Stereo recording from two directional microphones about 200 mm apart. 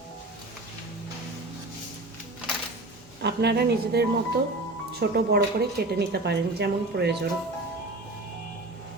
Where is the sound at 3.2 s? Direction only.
55° right (ahead or behind).